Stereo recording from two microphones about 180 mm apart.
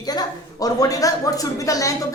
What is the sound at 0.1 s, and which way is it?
A woman's voice, 20° left (ahead or behind).